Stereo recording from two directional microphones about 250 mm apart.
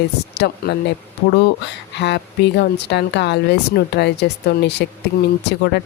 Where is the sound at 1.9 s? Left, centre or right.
Left.